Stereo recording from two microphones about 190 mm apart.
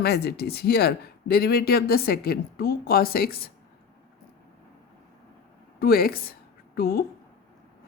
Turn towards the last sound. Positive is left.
turn(degrees=55)  # may be behind; listen again after turning